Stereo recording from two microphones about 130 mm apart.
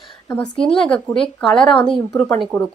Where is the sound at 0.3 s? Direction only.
5° left (ahead or behind).